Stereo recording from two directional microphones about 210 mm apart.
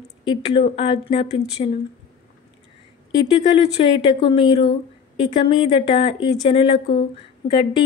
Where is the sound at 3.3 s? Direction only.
30° left (ahead or behind).